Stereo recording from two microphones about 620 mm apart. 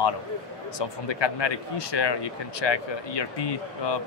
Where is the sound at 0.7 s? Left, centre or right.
Left.